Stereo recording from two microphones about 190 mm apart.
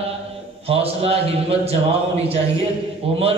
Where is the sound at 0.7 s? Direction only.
30° right (ahead or behind).